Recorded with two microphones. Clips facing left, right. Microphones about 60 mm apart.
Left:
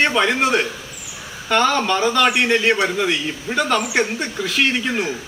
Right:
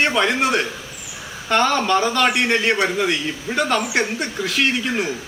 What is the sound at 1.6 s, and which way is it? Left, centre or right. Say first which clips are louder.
Speech: left 1 dB; centre.